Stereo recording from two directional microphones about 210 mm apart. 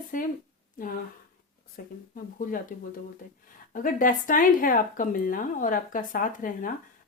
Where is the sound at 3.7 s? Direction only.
40° left (ahead or behind).